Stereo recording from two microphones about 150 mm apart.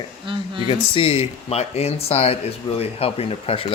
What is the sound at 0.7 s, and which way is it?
Speech, 40° left (ahead or behind).